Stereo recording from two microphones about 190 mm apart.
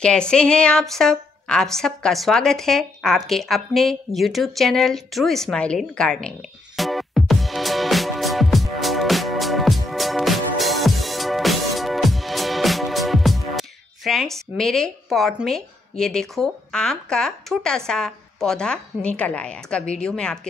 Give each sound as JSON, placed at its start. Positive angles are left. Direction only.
{"t": 0.0, "sound": "a woman's voice", "side_deg": 5}
{"t": 6.8, "sound": "music", "side_deg": 0}